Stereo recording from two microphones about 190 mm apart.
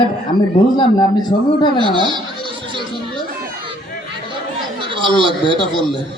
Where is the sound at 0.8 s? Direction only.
20° left (ahead or behind).